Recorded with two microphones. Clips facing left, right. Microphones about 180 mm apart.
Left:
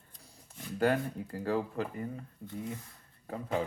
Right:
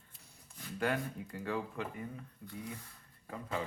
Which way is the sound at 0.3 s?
40° left (ahead or behind).